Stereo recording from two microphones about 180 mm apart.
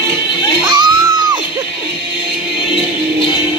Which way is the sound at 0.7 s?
25° right (ahead or behind).